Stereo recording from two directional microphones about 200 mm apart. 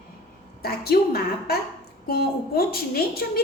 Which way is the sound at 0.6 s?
50° left (ahead or behind).